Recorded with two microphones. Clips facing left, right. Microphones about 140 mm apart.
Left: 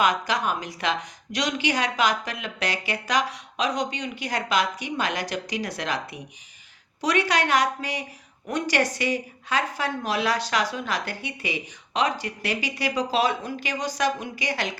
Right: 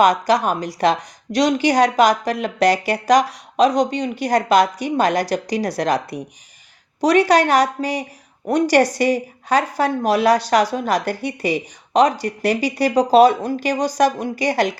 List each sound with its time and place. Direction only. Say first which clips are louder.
0.0 s speech: right 8 dB; 40° right (ahead or behind)